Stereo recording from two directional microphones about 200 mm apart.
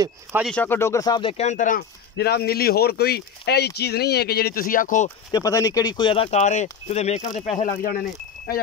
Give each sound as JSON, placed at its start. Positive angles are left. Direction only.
{"t": 0.4, "sound": "speech", "side_deg": 5}
{"t": 5.3, "sound": "speech", "side_deg": 15}